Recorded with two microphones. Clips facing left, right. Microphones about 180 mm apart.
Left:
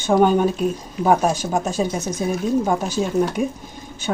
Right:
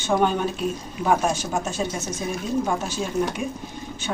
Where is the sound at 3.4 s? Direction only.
40° left (ahead or behind).